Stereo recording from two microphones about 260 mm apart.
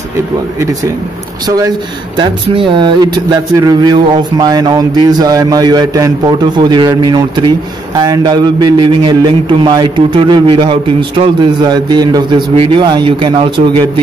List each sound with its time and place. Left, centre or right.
2.1 s speech: right